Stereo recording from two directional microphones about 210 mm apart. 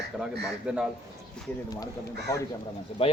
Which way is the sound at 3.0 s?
30° left (ahead or behind).